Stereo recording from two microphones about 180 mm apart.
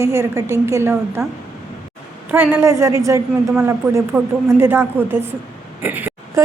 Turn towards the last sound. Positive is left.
turn(degrees=-10)  # may be behind; listen again after turning